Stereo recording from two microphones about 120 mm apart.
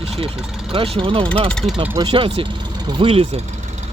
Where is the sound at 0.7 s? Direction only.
50° right (ahead or behind).